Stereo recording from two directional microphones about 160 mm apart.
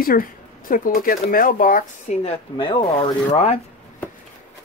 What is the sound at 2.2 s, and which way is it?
Speech, 35° left (ahead or behind).